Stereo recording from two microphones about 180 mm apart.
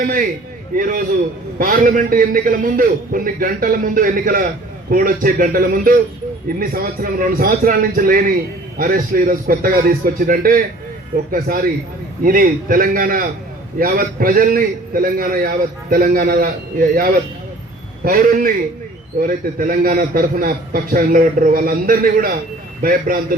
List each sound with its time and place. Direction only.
0.0 s a man's voice: 50° right (ahead or behind)